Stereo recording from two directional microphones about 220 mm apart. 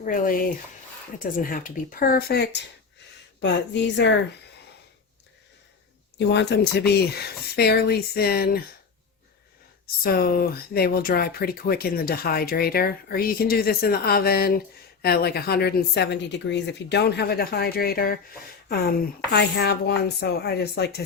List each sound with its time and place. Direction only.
0.0 s speech: 40° left (ahead or behind)
6.1 s speech: 50° left (ahead or behind)
9.8 s speech: 45° left (ahead or behind)